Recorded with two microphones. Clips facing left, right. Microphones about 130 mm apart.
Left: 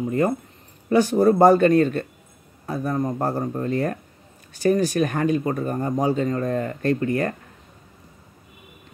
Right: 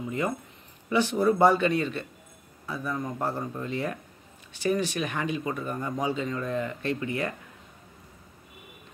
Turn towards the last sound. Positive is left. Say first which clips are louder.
# left 8 dB
turn(degrees=45)  # may be behind; listen again after turning